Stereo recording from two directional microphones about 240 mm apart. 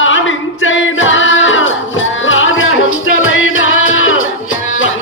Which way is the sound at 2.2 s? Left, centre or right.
Left.